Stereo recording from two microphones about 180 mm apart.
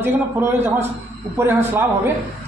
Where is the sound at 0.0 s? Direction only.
10° right (ahead or behind).